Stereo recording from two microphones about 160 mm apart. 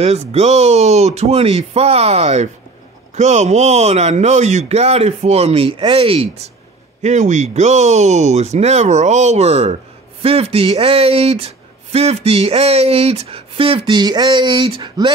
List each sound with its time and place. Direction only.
0.0 s speech: 40° right (ahead or behind)
7.0 s speech: 45° right (ahead or behind); by 15.1 s 30° right (ahead or behind)